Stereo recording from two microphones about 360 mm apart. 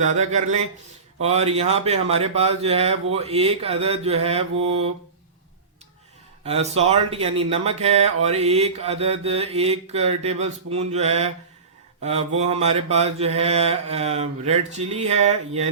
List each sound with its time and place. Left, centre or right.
0.0 s speech: centre
6.4 s speech: centre
12.4 s speech: centre